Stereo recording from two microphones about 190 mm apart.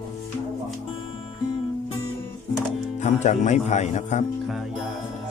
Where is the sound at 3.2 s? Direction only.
40° left (ahead or behind).